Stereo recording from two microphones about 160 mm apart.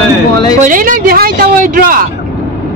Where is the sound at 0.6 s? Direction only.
55° right (ahead or behind).